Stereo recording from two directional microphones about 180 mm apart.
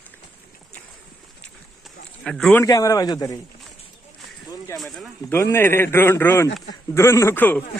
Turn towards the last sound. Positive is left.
turn(degrees=10)  # may be behind; listen again after turning